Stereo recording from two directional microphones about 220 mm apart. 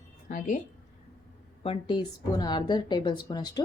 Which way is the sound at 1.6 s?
25° left (ahead or behind).